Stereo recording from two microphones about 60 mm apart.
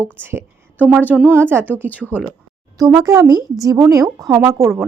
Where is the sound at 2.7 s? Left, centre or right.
Right.